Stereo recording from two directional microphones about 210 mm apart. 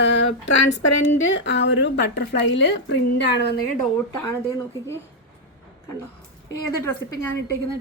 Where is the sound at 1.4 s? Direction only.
60° left (ahead or behind).